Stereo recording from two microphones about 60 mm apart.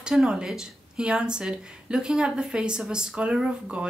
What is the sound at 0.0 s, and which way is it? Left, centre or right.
Speech, centre.